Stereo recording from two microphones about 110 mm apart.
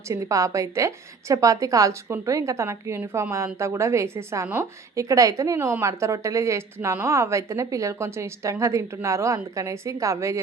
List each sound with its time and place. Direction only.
0.1 s a woman's voice: 30° right (ahead or behind)